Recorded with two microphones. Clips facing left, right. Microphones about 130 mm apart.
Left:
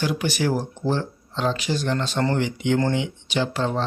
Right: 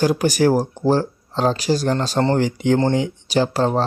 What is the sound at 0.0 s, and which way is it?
Speech, 40° right (ahead or behind).